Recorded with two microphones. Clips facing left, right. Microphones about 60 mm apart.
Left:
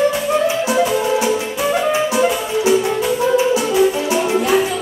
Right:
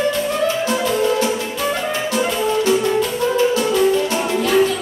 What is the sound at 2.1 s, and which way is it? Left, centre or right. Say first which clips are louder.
Music: left 1 dB; centre.